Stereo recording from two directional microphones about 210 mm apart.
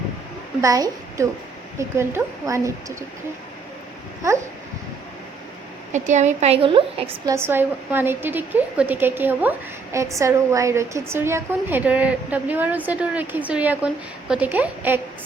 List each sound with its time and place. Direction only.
0.6 s a woman's voice: 15° right (ahead or behind)
5.9 s a woman's voice: 35° right (ahead or behind)
7.3 s a woman's voice: 10° right (ahead or behind)